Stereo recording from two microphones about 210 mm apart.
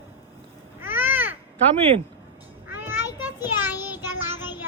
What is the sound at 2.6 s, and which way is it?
Child singing, 10° right (ahead or behind).